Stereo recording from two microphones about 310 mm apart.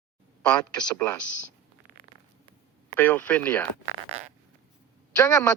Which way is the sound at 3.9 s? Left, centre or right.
Right.